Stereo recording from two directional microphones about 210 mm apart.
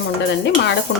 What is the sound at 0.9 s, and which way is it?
Speech, 50° left (ahead or behind).